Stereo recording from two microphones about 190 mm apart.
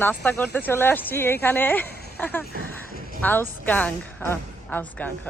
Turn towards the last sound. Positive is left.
turn(degrees=5)  # may be behind; listen again after turning